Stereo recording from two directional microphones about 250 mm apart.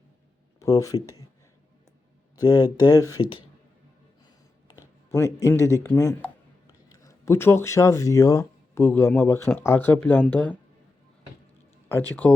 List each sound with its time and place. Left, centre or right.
0.6 s speech: centre
2.3 s speech: centre
5.1 s speech: centre
11.9 s speech: centre